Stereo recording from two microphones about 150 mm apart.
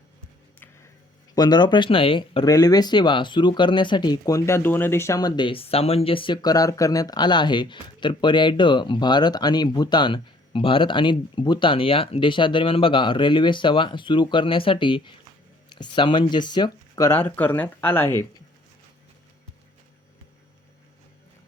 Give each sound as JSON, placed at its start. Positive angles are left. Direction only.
{"t": 1.4, "sound": "speech", "side_deg": 30}